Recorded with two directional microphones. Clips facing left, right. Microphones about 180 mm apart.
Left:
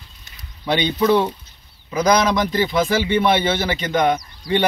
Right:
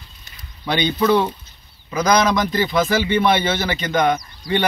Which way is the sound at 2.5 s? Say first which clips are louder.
Even; 25° left (ahead or behind).